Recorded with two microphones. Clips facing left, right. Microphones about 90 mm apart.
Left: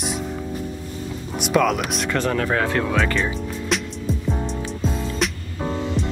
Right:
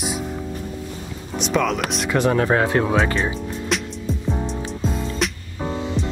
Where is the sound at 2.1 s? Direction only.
20° right (ahead or behind).